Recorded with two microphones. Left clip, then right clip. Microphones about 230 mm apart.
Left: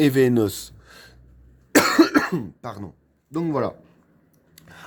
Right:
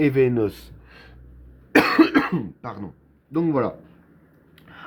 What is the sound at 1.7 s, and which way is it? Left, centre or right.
Speech, left.